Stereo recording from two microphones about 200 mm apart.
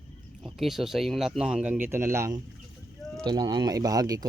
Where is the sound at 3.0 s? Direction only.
Centre (ahead or behind).